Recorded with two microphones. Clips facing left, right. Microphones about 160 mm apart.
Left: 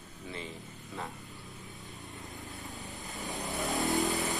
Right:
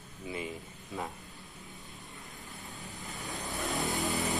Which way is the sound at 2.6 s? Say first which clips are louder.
Left 2 dB; 20° left (ahead or behind).